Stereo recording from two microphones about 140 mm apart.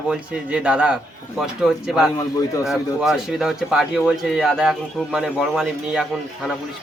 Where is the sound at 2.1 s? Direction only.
25° left (ahead or behind).